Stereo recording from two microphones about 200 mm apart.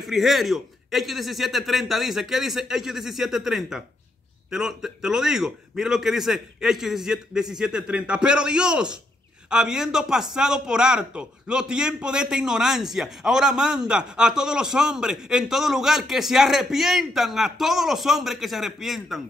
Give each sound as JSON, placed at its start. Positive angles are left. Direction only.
{"t": 0.0, "sound": "a man's voice", "side_deg": 0}